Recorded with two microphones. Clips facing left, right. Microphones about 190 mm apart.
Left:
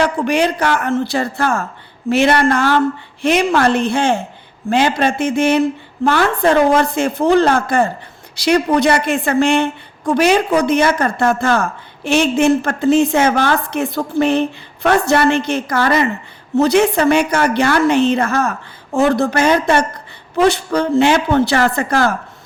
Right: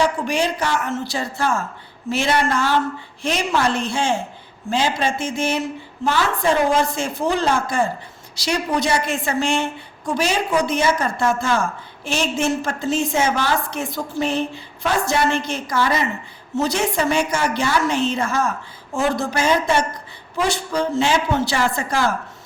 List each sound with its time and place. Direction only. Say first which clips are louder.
0.0 s speech: left 5 dB; 65° left (ahead or behind)